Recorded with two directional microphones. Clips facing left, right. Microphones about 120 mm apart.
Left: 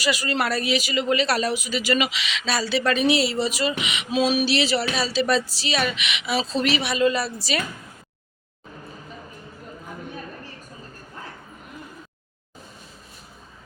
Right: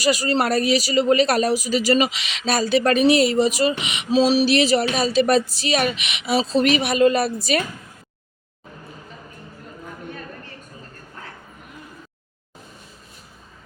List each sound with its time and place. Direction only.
0.0 s speech: 40° right (ahead or behind)